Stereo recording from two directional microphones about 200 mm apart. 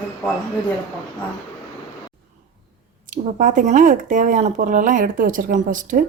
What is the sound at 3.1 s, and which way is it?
Speech, 40° right (ahead or behind).